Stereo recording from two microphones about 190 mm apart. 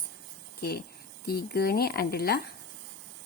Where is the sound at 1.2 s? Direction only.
55° left (ahead or behind).